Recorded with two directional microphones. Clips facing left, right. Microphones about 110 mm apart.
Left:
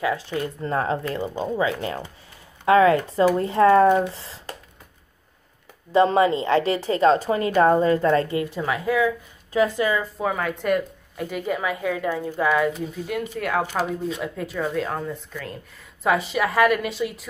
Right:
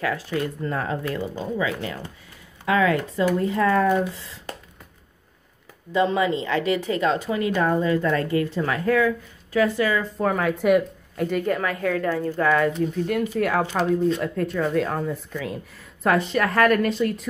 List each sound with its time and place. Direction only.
0.0 s a woman's voice: 20° left (ahead or behind)
5.9 s a woman's voice: 35° left (ahead or behind); by 9.1 s 10° left (ahead or behind)
9.5 s speech: 20° left (ahead or behind)
10.1 s speech: centre (ahead or behind)